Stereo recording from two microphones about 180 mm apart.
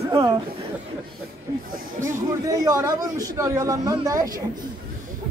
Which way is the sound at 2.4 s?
20° right (ahead or behind).